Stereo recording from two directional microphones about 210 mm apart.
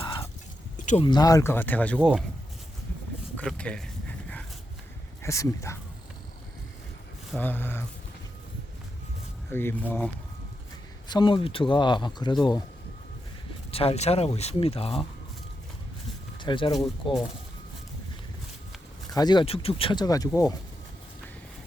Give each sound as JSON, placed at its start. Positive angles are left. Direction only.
{"t": 0.0, "sound": "fowl", "side_deg": 20}
{"t": 0.8, "sound": "a sound", "side_deg": 35}
{"t": 1.0, "sound": "speech", "side_deg": 20}
{"t": 3.3, "sound": "speech", "side_deg": 5}
{"t": 5.2, "sound": "speech", "side_deg": 15}
{"t": 7.3, "sound": "speech", "side_deg": 10}
{"t": 9.5, "sound": "speech", "side_deg": 10}
{"t": 11.1, "sound": "speech", "side_deg": 25}
{"t": 13.7, "sound": "speech", "side_deg": 30}
{"t": 16.4, "sound": "speech", "side_deg": 20}
{"t": 19.1, "sound": "speech", "side_deg": 20}